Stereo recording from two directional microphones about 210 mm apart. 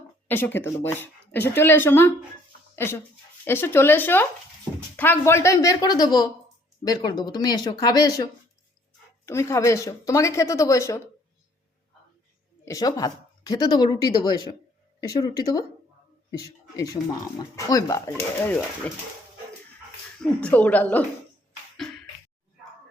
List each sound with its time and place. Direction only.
0.3 s speech: 10° left (ahead or behind)
12.6 s speech: 15° left (ahead or behind)
20.4 s speech: 5° left (ahead or behind)